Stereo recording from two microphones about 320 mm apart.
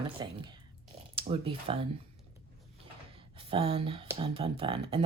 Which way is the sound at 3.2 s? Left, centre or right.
Centre.